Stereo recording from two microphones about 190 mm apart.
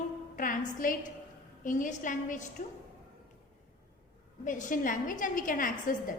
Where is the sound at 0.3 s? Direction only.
45° left (ahead or behind).